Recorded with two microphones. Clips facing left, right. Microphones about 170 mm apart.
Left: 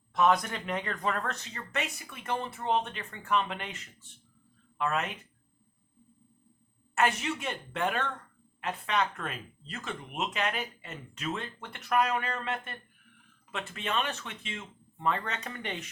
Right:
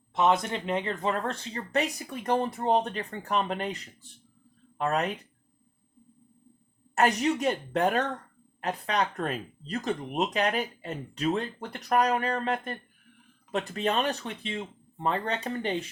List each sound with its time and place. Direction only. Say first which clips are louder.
0.1 s speech: right 1 dB; 25° right (ahead or behind)
6.9 s speech: right 5 dB; 40° right (ahead or behind)